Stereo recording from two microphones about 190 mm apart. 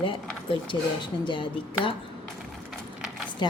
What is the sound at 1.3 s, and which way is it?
Speech, 25° left (ahead or behind).